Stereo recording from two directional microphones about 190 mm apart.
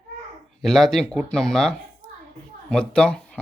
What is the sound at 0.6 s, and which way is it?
Speech, centre (ahead or behind).